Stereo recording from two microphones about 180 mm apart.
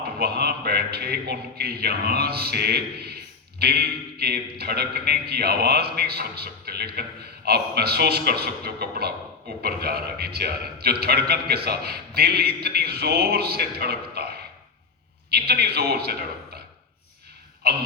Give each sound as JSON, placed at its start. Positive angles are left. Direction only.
{"t": 0.2, "sound": "a man's voice", "side_deg": -60}
{"t": 17.6, "sound": "a man's voice", "side_deg": -60}